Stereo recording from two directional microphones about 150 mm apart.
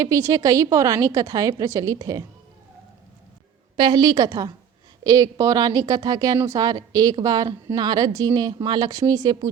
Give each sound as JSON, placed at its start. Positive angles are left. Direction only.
{"t": 0.0, "sound": "a woman's voice", "side_deg": -20}
{"t": 3.8, "sound": "a woman's voice", "side_deg": -30}